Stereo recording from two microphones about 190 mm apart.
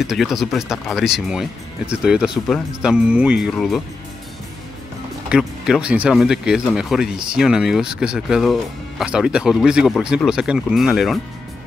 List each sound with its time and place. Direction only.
0.0 s speech: centre (ahead or behind)
5.3 s speech: 5° right (ahead or behind)